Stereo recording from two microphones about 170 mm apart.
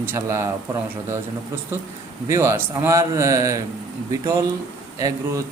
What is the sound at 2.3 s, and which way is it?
Speech, 15° right (ahead or behind).